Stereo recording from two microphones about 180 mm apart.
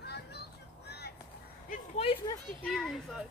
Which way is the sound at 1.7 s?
35° left (ahead or behind).